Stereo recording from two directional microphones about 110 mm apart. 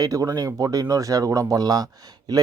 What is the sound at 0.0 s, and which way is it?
Speech, 30° right (ahead or behind).